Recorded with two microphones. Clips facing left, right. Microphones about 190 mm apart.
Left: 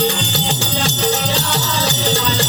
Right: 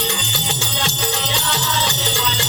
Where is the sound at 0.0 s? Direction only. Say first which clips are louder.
Left 6 dB; 40° left (ahead or behind).